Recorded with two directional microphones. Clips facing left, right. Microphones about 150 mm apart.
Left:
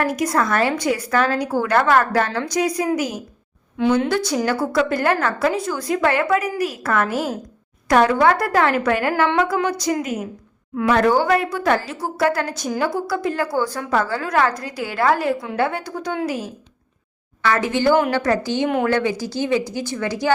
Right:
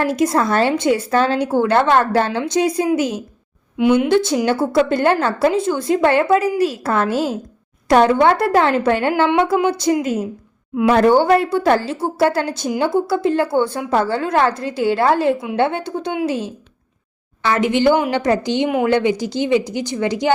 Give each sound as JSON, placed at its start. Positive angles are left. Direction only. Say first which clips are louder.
{"t": 0.0, "sound": "a woman's voice", "louder": "right 3 dB", "side_deg": -25}
{"t": 3.8, "sound": "a woman's voice", "louder": "right 4 dB", "side_deg": -15}